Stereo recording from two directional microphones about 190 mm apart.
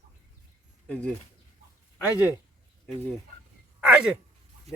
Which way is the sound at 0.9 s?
5° left (ahead or behind).